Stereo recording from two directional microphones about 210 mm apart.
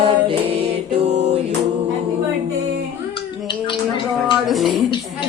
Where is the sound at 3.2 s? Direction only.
25° left (ahead or behind).